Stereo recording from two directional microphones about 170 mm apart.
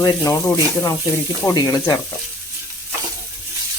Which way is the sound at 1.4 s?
20° left (ahead or behind).